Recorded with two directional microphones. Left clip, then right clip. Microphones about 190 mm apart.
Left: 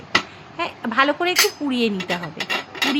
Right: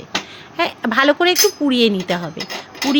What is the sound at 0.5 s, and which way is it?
A woman's voice, 40° right (ahead or behind).